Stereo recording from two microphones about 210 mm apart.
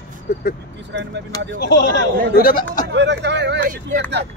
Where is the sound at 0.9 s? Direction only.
55° right (ahead or behind).